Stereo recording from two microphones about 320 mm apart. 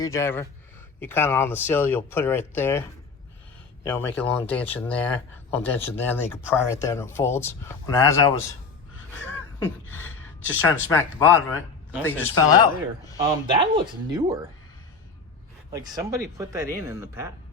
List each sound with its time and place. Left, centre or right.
0.0 s speech: centre
3.8 s speech: centre
9.2 s a sound: centre
10.5 s speech: centre
13.5 s speech: centre
15.7 s speech: centre